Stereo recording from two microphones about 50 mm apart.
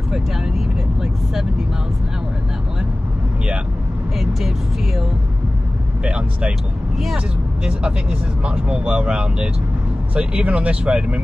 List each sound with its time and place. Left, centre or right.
4.2 s speech: centre
6.0 s speech: right
7.6 s speech: centre